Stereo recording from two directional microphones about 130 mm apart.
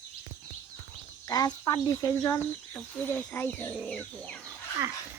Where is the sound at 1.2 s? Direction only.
30° left (ahead or behind); by 4.4 s 10° left (ahead or behind).